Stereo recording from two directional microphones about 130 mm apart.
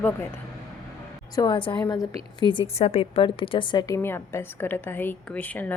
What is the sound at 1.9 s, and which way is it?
Speech, 30° left (ahead or behind).